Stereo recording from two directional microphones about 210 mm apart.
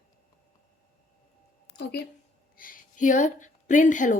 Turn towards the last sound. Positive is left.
turn(degrees=35)  # may be behind; listen again after turning